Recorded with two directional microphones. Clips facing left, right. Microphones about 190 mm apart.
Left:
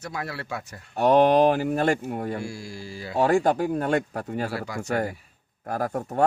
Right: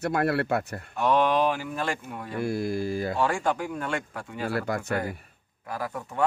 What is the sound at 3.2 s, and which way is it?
Speech, 40° left (ahead or behind).